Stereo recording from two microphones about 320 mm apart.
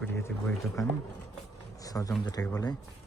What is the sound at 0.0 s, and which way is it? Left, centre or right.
Speech, centre.